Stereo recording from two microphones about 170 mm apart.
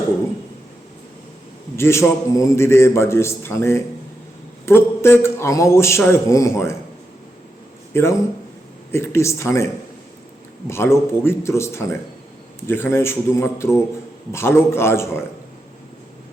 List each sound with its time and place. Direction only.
1.7 s a man's voice: 15° left (ahead or behind)
7.9 s a man's voice: 15° left (ahead or behind)
10.7 s a man's voice: 15° left (ahead or behind)